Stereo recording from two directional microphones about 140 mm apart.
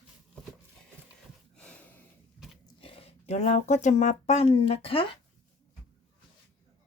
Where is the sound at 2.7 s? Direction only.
40° left (ahead or behind).